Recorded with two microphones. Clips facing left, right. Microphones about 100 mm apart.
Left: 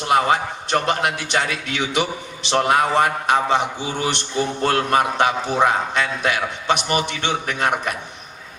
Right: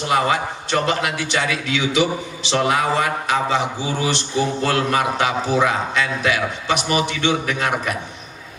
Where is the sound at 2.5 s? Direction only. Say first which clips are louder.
Left 1 dB; 50° left (ahead or behind).